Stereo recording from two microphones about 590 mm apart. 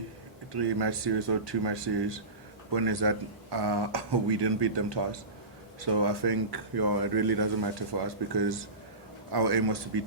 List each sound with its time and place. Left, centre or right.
0.5 s speech: right